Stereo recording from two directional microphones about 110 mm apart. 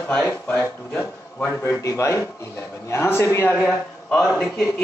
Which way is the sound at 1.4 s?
25° left (ahead or behind).